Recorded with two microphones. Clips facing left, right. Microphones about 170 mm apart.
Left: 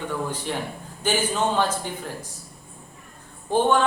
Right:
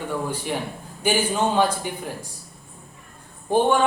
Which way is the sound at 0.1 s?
10° right (ahead or behind).